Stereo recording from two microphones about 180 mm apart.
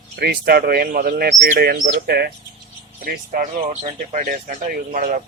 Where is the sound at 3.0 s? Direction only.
50° right (ahead or behind).